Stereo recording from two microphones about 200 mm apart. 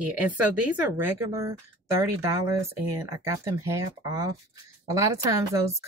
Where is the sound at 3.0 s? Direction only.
15° right (ahead or behind).